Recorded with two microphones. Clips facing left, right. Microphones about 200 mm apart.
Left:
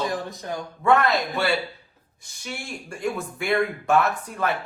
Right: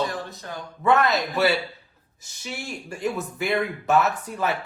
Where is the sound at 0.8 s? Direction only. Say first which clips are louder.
Even; centre (ahead or behind).